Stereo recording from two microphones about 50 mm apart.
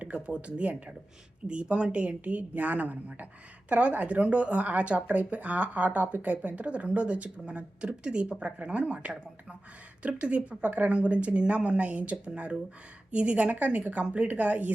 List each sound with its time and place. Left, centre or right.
0.0 s speech: right